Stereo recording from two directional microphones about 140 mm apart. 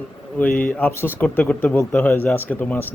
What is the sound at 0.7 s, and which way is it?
Speech, 15° left (ahead or behind).